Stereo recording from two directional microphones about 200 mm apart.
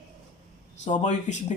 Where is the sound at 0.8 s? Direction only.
35° left (ahead or behind).